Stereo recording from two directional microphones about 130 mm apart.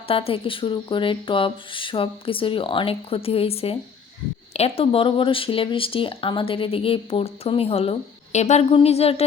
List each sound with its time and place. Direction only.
0.1 s speech: 45° left (ahead or behind)